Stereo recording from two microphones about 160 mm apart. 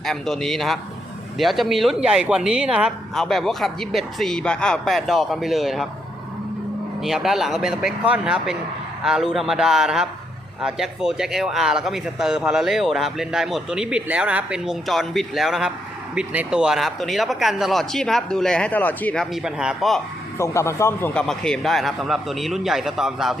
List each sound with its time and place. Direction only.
0.0 s speech: centre (ahead or behind)
7.0 s speech: centre (ahead or behind)
20.4 s speech: 15° left (ahead or behind)
21.1 s speech: 5° left (ahead or behind)